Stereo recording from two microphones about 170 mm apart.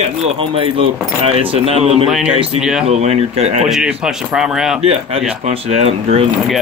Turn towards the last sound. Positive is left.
turn(degrees=-40)  # may be behind; listen again after turning